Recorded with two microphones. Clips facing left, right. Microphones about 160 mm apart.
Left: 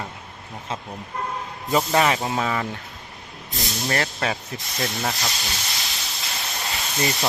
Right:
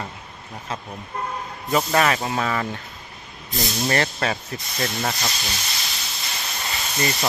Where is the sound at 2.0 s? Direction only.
15° left (ahead or behind).